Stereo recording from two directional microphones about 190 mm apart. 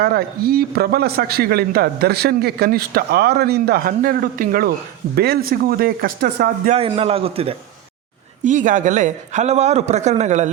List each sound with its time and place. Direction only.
0.0 s a man's voice: 55° right (ahead or behind)
6.7 s a man's voice: 30° right (ahead or behind)
8.4 s a man's voice: 40° right (ahead or behind)